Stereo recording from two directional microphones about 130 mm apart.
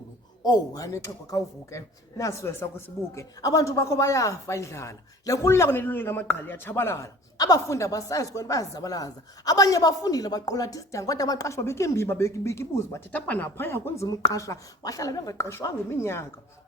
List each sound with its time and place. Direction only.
0.4 s speech: 30° left (ahead or behind)